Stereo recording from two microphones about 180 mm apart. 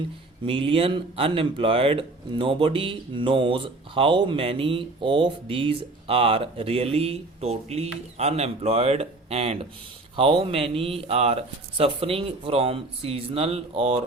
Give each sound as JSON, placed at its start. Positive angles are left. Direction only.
{"t": 0.4, "sound": "speech", "side_deg": -30}